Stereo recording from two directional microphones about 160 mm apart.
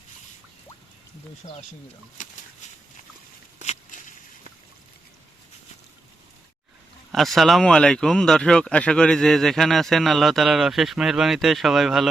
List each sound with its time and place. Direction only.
1.4 s speech: 45° left (ahead or behind)
7.1 s speech: centre (ahead or behind)